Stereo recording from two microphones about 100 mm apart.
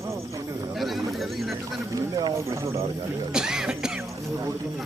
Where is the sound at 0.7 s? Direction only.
Centre (ahead or behind).